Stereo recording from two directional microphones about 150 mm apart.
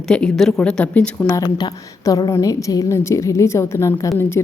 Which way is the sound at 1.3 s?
25° left (ahead or behind).